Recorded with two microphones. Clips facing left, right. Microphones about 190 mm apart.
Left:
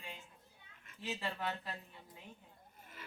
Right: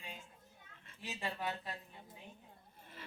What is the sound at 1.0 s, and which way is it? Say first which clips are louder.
Speech: left 1 dB; 20° right (ahead or behind).